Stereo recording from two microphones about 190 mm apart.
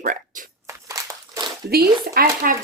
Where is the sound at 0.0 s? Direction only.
45° right (ahead or behind).